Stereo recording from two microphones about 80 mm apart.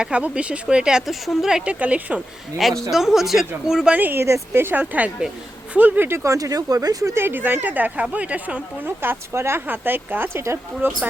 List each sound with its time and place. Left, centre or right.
0.0 s speech: centre
2.6 s speech: centre
3.9 s a woman's voice: right
4.8 s a woman's voice: centre
6.3 s speech: right
7.1 s a woman's voice: right
9.0 s a woman's voice: right
10.8 s a woman's voice: right